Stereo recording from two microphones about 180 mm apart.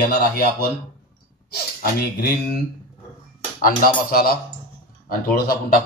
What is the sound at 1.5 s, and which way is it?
Speech, 60° left (ahead or behind).